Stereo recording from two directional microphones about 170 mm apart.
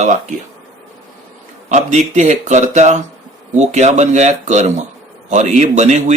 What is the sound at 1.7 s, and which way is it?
A man's voice, 45° right (ahead or behind).